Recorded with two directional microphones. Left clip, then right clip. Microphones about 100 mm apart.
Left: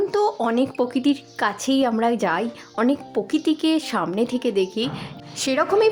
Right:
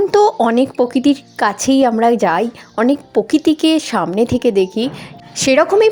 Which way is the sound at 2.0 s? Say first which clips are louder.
Right 8 dB; 60° right (ahead or behind).